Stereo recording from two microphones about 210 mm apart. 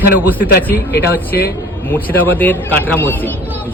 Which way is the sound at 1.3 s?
50° left (ahead or behind).